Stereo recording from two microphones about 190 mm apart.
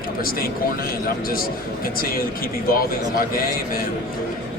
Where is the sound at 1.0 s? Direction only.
50° left (ahead or behind).